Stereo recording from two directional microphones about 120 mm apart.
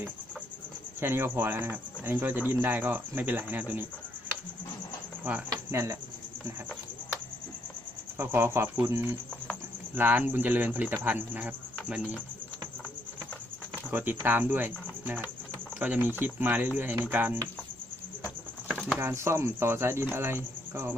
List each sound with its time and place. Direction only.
1.0 s speech: 20° right (ahead or behind)
5.5 s cricket: 25° right (ahead or behind)
8.2 s speech: 20° right (ahead or behind)
13.9 s speech: 15° right (ahead or behind)
18.7 s a sound: 5° right (ahead or behind)
18.9 s speech: 20° right (ahead or behind)